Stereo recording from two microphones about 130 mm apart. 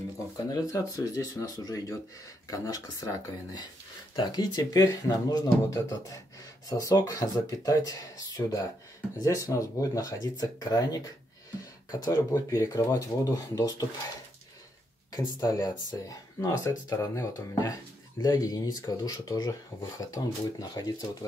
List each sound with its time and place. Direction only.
0.5 s speech: 25° left (ahead or behind)
15.1 s speech: 25° left (ahead or behind)